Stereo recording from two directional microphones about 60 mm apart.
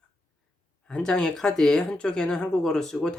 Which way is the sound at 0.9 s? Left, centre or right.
Centre.